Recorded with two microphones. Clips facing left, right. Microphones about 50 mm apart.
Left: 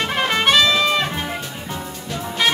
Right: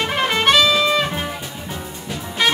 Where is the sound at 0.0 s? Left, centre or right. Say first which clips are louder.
Right 1 dB; centre.